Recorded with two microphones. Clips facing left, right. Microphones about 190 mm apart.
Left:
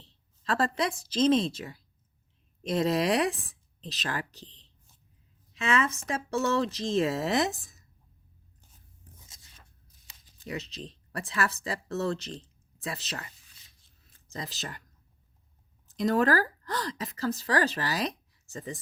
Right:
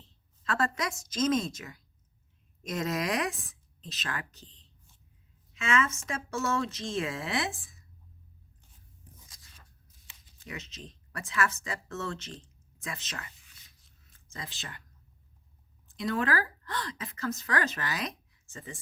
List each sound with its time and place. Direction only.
0.0 s a woman's voice: 35° left (ahead or behind)
9.2 s a sound: 25° left (ahead or behind)
10.1 s speech: 35° left (ahead or behind)
15.9 s speech: 40° left (ahead or behind)